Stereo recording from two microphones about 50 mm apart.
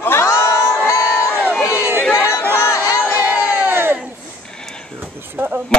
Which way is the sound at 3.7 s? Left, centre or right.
Right.